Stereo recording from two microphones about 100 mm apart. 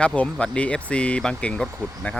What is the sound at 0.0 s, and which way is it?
Speech, 10° left (ahead or behind).